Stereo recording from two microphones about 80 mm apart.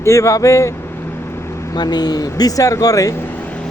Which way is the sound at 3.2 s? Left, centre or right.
Left.